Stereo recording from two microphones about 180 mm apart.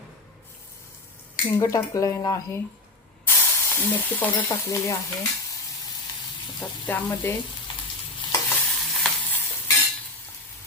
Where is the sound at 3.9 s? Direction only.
10° left (ahead or behind).